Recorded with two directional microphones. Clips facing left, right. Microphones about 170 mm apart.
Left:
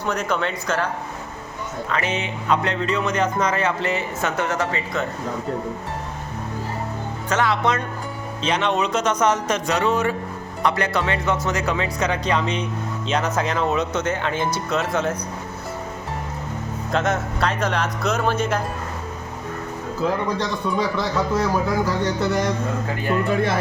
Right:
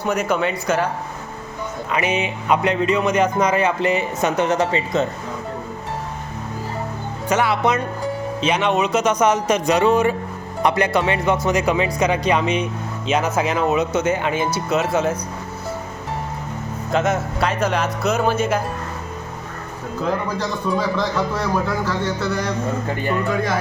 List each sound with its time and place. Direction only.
0.0 s speech: 10° right (ahead or behind)
1.9 s speech: 15° right (ahead or behind)
7.3 s speech: 10° right (ahead or behind)
16.9 s speech: 5° right (ahead or behind)
20.4 s speech: centre (ahead or behind)
21.8 s speech: 20° left (ahead or behind)